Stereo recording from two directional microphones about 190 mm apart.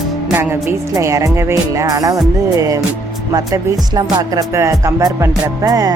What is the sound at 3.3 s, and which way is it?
Music, 20° right (ahead or behind).